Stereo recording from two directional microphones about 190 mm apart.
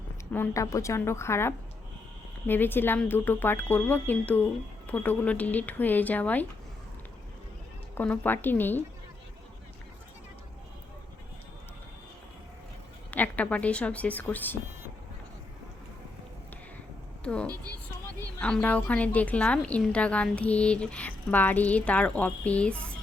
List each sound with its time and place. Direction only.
0.3 s a woman's voice: 15° left (ahead or behind)
7.9 s a woman's voice: 10° left (ahead or behind)
13.1 s a woman's voice: 10° left (ahead or behind)
17.2 s a woman's voice: 5° left (ahead or behind)
17.5 s a woman's voice: 20° right (ahead or behind)
18.3 s a woman's voice: 5° left (ahead or behind)